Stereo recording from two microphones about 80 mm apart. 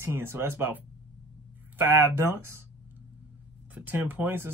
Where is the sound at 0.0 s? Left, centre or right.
Right.